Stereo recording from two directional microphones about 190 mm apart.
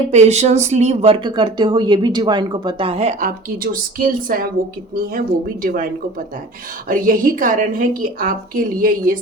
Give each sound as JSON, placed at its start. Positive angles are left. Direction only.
{"t": 0.1, "sound": "speech", "side_deg": -35}
{"t": 5.6, "sound": "a woman's voice", "side_deg": -45}